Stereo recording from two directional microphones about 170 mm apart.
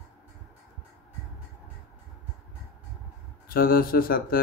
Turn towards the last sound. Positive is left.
turn(degrees=60)  # may be behind; listen again after turning